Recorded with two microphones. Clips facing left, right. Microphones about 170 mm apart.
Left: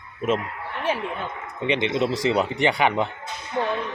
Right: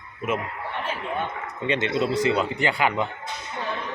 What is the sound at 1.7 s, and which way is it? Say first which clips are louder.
A man's voice: left 1 dB; 15° left (ahead or behind).